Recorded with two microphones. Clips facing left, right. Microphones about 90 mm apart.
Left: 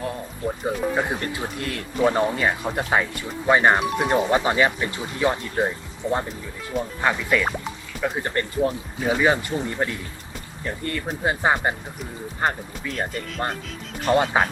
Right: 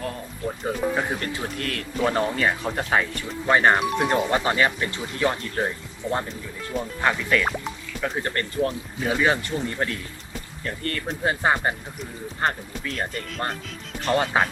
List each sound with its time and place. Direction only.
0.0 s speech: 20° left (ahead or behind)
0.6 s speech: 5° left (ahead or behind)
1.0 s speech: 15° left (ahead or behind)